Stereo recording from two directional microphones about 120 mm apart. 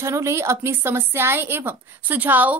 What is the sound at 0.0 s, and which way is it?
A woman's voice, 25° right (ahead or behind).